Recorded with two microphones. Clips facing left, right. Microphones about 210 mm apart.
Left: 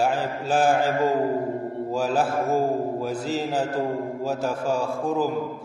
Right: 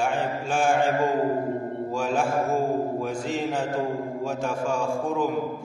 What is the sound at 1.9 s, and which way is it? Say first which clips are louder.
A man's voice: left 2 dB; 35° left (ahead or behind).